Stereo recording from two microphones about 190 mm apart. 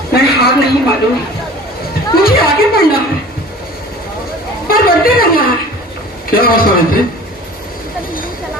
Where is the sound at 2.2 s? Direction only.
50° left (ahead or behind).